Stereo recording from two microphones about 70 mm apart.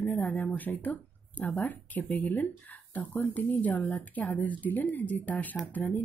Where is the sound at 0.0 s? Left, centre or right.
Left.